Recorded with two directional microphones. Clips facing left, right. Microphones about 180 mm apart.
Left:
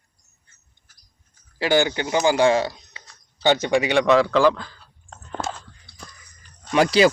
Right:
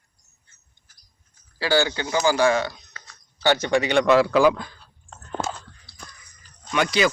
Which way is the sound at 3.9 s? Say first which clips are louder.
Right 1 dB; centre (ahead or behind).